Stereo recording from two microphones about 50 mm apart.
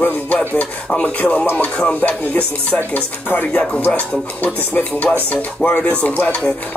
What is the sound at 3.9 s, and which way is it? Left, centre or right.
Speech, left.